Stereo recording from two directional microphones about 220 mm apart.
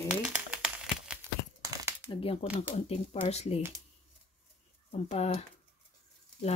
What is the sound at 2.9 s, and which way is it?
Speech, 30° left (ahead or behind).